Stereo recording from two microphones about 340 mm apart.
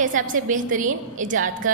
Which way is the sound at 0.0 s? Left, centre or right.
Right.